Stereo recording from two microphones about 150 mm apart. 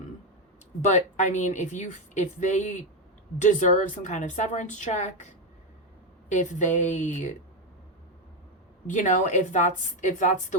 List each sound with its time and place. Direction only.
0.8 s a woman's voice: 50° left (ahead or behind)
8.9 s a woman's voice: 55° left (ahead or behind)